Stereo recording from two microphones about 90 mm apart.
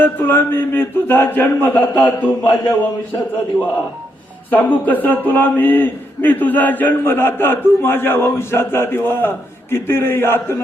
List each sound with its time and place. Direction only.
0.0 s a man's voice: 25° left (ahead or behind)
4.5 s a man's voice: 20° left (ahead or behind)